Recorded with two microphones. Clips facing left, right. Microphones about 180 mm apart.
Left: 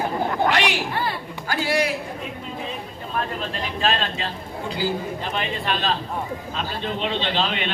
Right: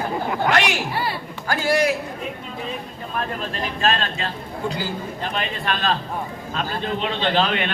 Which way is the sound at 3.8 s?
45° right (ahead or behind).